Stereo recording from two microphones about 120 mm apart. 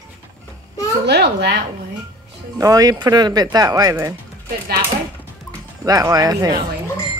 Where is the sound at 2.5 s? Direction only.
30° right (ahead or behind).